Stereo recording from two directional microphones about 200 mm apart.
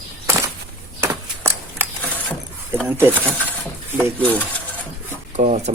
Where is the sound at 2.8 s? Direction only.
10° right (ahead or behind).